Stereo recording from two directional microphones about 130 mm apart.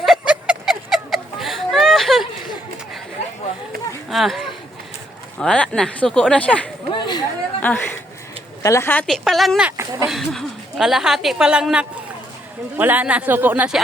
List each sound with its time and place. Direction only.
0.0 s a sound: 5° right (ahead or behind)
4.1 s a woman's voice: centre (ahead or behind)
6.9 s chatter: 35° left (ahead or behind)
7.6 s speech: 10° left (ahead or behind)
9.0 s a woman's voice: centre (ahead or behind)
9.7 s a sound: 25° right (ahead or behind)
10.1 s a woman's voice: centre (ahead or behind)